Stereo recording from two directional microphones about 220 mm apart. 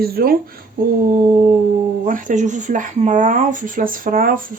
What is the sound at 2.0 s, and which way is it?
Speech, 35° right (ahead or behind).